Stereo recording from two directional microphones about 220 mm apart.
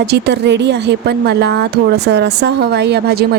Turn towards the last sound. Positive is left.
turn(degrees=-45)  # may be behind; listen again after turning